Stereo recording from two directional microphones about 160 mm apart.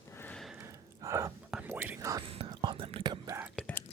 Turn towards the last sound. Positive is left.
turn(degrees=-10)  # may be behind; listen again after turning